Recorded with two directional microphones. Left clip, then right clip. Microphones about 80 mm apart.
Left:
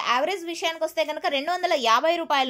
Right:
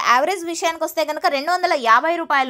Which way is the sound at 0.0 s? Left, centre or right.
Right.